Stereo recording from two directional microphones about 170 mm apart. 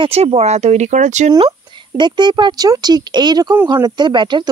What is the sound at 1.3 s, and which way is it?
Speech, 25° right (ahead or behind).